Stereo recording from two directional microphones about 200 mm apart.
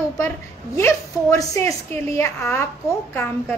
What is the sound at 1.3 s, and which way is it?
A woman's voice, 15° left (ahead or behind).